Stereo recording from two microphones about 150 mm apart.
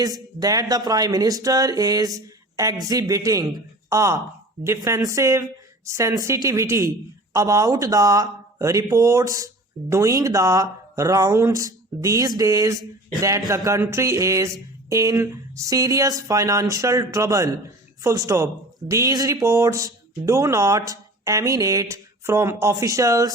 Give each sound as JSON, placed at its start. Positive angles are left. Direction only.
{"t": 0.0, "sound": "speech", "side_deg": -25}